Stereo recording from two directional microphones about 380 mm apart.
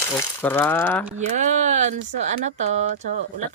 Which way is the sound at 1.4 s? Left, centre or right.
Centre.